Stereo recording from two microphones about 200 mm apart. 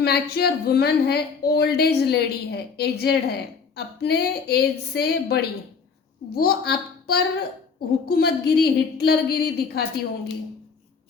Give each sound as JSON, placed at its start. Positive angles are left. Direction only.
{"t": 0.0, "sound": "speech", "side_deg": 55}